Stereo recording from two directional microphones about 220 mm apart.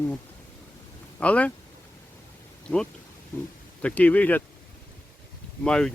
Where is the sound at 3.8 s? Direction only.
5° left (ahead or behind).